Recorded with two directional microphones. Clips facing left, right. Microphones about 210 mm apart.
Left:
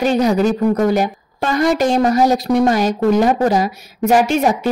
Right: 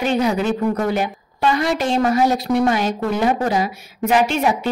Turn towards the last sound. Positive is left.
turn(degrees=45)  # may be behind; listen again after turning